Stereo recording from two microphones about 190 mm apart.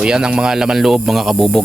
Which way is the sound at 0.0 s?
5° right (ahead or behind).